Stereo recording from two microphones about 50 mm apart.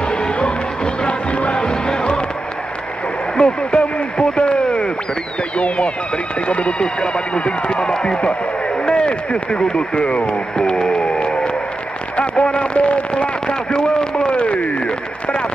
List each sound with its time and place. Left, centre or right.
0.1 s music: centre
3.3 s radio: centre
6.4 s speech: left
14.1 s a sound: left